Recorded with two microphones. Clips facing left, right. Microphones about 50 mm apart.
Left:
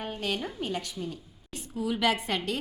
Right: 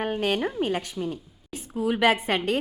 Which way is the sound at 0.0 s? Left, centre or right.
Right.